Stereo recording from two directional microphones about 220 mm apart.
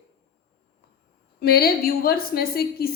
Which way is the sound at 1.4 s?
45° left (ahead or behind).